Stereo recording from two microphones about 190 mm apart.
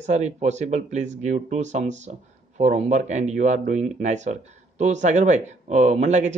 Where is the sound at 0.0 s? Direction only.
35° right (ahead or behind).